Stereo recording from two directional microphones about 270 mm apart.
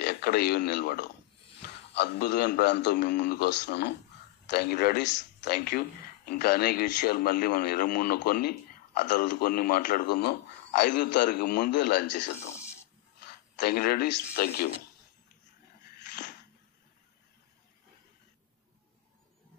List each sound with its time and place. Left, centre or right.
0.0 s a man's voice: left
13.6 s a man's voice: left